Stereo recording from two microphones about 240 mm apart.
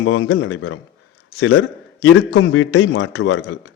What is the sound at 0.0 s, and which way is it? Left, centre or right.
A man's voice, left.